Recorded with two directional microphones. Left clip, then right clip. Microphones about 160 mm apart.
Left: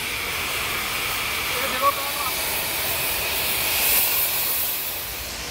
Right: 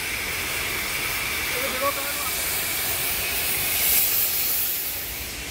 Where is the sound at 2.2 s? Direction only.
80° left; by 4.0 s 55° left (ahead or behind).